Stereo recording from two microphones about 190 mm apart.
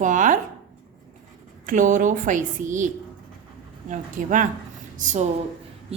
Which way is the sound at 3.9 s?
40° right (ahead or behind).